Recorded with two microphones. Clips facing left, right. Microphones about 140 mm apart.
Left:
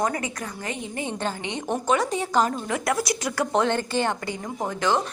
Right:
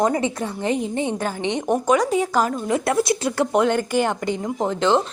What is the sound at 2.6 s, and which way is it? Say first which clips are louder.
Speech: right 5 dB; 25° right (ahead or behind).